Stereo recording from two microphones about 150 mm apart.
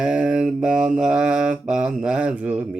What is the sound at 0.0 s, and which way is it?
Mantra, 5° right (ahead or behind).